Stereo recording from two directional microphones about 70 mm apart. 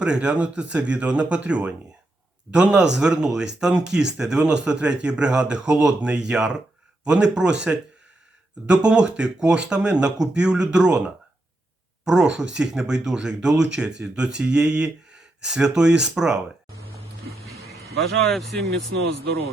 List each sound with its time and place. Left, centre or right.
0.0 s speech: centre
18.3 s speech: centre